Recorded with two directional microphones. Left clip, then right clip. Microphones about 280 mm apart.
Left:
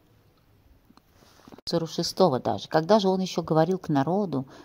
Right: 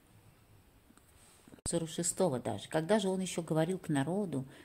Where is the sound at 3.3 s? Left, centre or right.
Centre.